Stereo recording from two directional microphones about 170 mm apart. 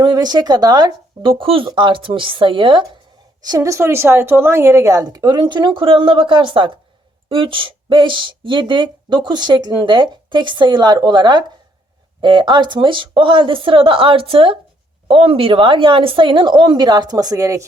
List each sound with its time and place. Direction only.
0.0 s speech: 25° right (ahead or behind)